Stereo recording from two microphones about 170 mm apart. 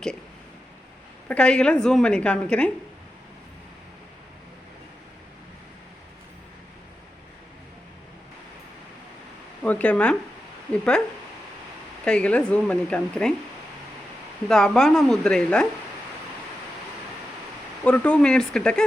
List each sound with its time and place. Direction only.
1.3 s a woman's voice: 5° left (ahead or behind)
9.6 s a woman's voice: 10° left (ahead or behind)
12.0 s speech: 5° left (ahead or behind)
14.4 s speech: 5° left (ahead or behind)
17.8 s speech: 5° left (ahead or behind)